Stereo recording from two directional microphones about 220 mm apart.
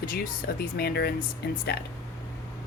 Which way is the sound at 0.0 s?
45° left (ahead or behind).